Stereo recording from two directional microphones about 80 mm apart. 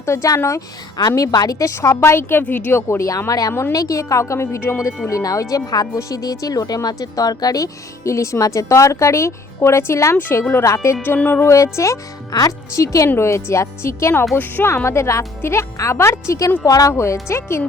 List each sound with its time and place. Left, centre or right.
0.0 s speech: left
0.9 s a woman's voice: left
3.1 s speech: left
5.0 s speech: left
11.0 s a woman's voice: left
11.4 s speech: left
12.3 s a woman's voice: left
14.8 s speech: left
16.9 s speech: left